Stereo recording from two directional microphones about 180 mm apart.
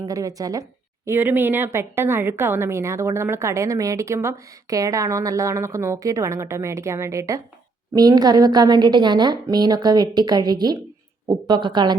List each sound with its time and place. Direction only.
0.0 s a woman's voice: 20° right (ahead or behind)